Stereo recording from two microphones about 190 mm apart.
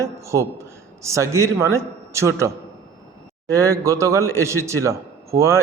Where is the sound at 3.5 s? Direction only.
15° right (ahead or behind).